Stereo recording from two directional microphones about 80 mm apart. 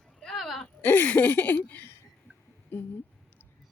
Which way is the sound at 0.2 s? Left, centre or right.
Centre.